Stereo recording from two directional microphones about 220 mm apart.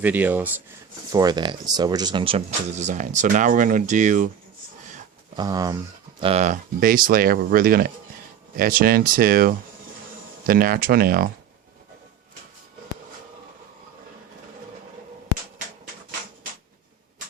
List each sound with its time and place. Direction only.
0.0 s speech: 10° right (ahead or behind); by 4.3 s 35° right (ahead or behind)
5.4 s speech: 15° right (ahead or behind)
6.1 s speech: 25° right (ahead or behind)